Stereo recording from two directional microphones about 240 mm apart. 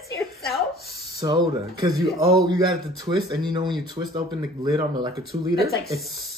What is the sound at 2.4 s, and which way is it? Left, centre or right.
Speech, centre.